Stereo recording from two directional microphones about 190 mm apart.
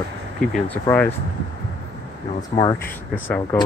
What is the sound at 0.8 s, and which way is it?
Speech, 10° left (ahead or behind).